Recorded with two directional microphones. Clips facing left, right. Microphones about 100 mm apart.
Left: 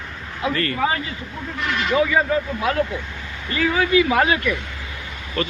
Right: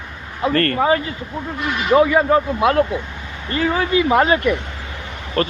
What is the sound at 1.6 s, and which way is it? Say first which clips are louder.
Speech: right 1 dB; 15° right (ahead or behind).